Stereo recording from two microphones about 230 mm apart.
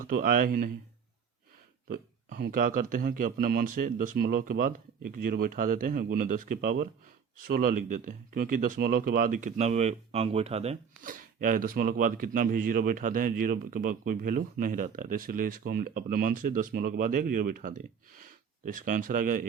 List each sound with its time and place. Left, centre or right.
0.0 s speech: right
1.9 s speech: right